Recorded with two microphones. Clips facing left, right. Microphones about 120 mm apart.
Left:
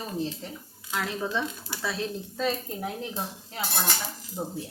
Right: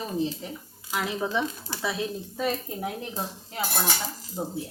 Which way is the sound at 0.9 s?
15° right (ahead or behind).